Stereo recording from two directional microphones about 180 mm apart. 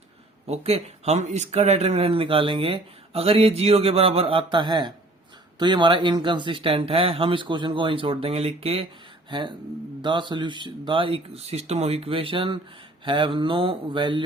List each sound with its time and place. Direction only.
0.4 s speech: 35° right (ahead or behind)